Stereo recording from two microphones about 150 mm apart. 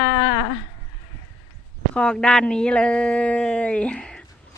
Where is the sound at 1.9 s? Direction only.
5° left (ahead or behind).